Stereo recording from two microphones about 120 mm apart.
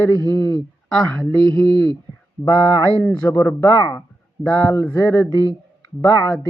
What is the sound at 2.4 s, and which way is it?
Speech, 15° left (ahead or behind).